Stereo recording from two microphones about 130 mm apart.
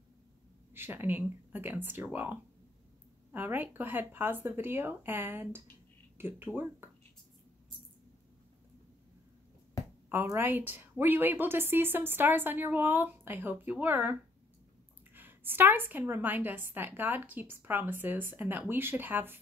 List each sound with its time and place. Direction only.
0.7 s a woman's voice: 15° right (ahead or behind)
10.0 s a woman's voice: 15° right (ahead or behind)
15.1 s a woman's voice: 15° right (ahead or behind)